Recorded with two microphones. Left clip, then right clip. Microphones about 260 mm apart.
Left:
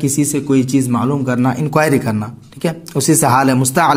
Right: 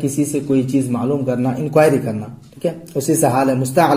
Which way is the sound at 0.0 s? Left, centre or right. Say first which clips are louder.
Left 2 dB; left.